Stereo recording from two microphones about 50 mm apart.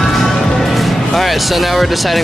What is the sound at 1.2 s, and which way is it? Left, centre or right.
Speech, centre.